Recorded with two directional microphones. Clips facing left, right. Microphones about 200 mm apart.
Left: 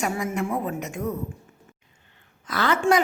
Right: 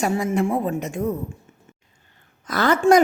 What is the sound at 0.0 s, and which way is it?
A woman's voice, 30° right (ahead or behind).